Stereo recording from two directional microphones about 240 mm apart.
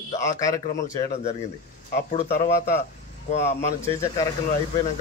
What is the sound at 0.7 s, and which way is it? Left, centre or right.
Speech, left.